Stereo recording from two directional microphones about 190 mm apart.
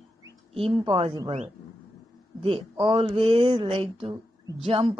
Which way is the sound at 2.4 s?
25° right (ahead or behind).